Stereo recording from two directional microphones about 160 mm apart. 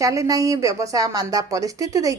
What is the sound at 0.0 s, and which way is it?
A woman's voice, 20° right (ahead or behind).